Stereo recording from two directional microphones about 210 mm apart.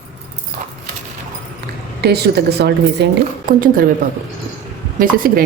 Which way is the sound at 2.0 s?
50° right (ahead or behind).